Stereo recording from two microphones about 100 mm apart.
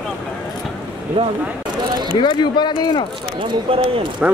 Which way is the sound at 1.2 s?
55° right (ahead or behind).